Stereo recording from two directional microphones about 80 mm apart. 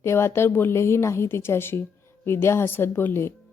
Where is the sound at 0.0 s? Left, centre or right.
Left.